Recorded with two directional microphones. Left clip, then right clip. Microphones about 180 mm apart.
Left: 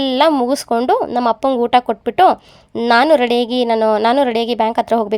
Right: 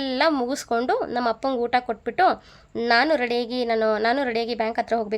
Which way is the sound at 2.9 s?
40° left (ahead or behind).